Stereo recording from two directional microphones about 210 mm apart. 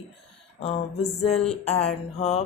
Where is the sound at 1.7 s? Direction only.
30° left (ahead or behind).